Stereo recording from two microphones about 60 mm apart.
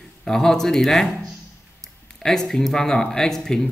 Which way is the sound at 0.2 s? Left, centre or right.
Centre.